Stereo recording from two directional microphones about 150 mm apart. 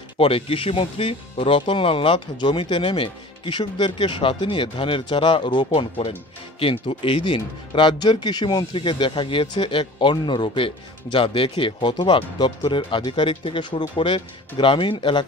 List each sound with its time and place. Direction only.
0.2 s speech: 35° left (ahead or behind)